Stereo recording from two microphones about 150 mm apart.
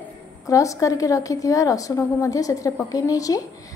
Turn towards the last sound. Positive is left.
turn(degrees=25)  # may be behind; listen again after turning